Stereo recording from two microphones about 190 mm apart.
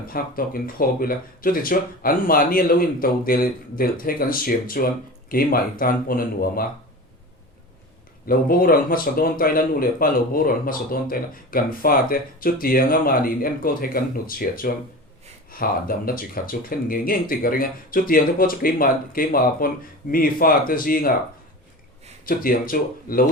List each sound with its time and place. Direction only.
0.1 s speech: 50° left (ahead or behind)
8.3 s speech: 50° left (ahead or behind)
22.3 s speech: 50° left (ahead or behind)